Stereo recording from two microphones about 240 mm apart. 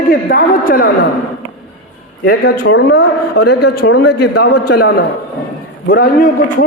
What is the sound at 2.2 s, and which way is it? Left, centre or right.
Speech, left.